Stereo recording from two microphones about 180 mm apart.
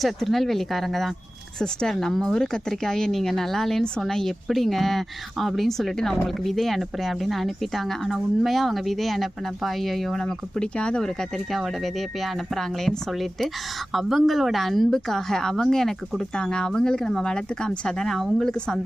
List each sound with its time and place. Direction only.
0.0 s speech: centre (ahead or behind)